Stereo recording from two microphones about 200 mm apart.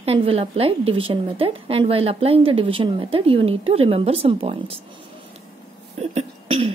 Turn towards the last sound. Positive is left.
turn(degrees=-30)  # may be behind; listen again after turning